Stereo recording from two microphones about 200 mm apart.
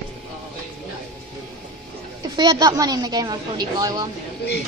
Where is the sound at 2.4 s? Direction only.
20° right (ahead or behind).